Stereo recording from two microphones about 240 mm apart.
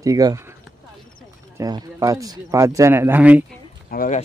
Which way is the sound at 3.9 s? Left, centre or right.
Left.